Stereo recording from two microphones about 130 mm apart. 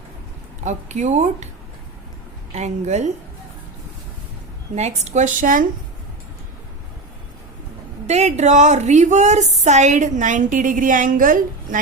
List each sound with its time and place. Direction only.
0.6 s a woman's voice: 65° right (ahead or behind)
2.5 s a woman's voice: 60° right (ahead or behind)
4.7 s a woman's voice: 60° right (ahead or behind); by 5.6 s 90° right
8.0 s a woman's voice: 60° right (ahead or behind); by 11.8 s 90° right